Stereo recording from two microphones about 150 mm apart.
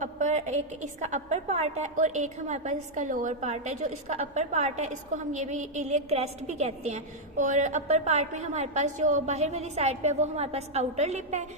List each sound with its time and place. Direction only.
0.0 s a woman's voice: 50° right (ahead or behind)